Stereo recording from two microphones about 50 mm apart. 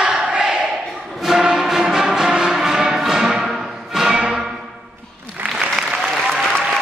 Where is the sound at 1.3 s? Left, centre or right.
Centre.